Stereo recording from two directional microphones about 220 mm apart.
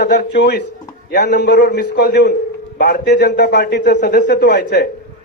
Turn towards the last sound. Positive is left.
turn(degrees=50)  # may be behind; listen again after turning